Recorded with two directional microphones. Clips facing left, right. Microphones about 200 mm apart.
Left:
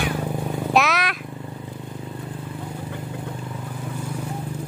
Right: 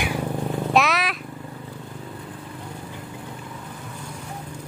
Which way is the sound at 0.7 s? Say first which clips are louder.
Left 1 dB; centre (ahead or behind).